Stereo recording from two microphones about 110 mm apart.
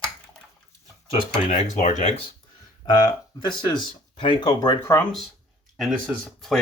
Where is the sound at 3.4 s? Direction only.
45° left (ahead or behind).